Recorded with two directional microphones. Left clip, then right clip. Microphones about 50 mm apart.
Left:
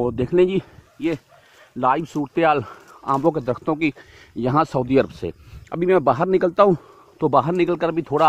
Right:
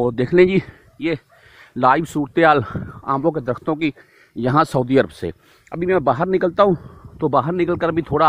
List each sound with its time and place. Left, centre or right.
0.0 s speech: centre
0.9 s speech: right
3.1 s a man's voice: centre
4.4 s speech: centre
5.8 s speech: left
6.0 s a man's voice: centre